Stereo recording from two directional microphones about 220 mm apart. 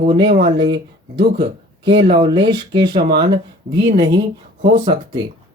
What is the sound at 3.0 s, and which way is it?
Speech, 45° right (ahead or behind).